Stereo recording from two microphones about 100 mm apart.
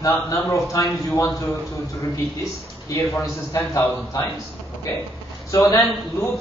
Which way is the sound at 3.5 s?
30° left (ahead or behind).